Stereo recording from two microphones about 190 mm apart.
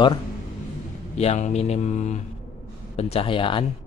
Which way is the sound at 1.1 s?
35° left (ahead or behind).